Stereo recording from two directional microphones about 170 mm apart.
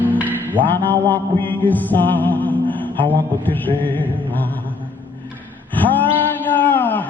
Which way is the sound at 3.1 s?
10° left (ahead or behind).